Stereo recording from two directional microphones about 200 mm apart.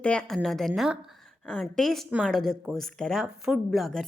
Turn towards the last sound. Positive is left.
turn(degrees=0)  # may be behind; listen again after turning